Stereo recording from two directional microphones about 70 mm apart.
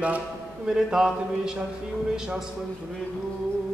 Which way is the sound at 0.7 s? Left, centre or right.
Centre.